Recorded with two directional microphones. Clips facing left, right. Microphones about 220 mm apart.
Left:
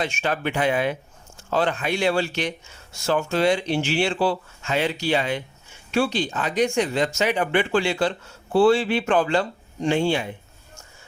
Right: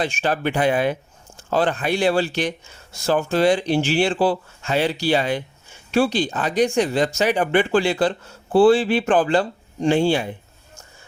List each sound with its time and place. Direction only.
0.0 s speech: 35° right (ahead or behind)